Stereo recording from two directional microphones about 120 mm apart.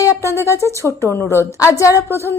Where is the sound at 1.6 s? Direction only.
25° left (ahead or behind).